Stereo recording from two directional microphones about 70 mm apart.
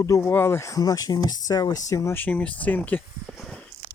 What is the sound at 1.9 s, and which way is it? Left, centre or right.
Speech, left.